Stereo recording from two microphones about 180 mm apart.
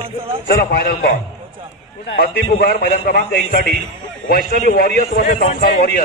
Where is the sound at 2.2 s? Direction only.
55° left (ahead or behind).